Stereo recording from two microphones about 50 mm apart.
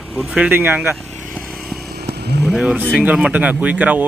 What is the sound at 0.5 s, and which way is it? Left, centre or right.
Speech, right.